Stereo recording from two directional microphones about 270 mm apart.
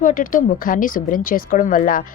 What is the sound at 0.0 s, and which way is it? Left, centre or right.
Speech, left.